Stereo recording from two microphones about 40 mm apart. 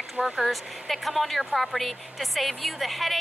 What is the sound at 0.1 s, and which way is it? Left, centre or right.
Speech, right.